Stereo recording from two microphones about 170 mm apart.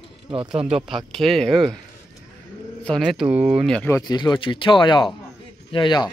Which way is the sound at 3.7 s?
10° left (ahead or behind).